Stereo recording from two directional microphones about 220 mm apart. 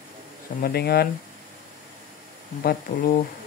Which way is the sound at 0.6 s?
45° left (ahead or behind).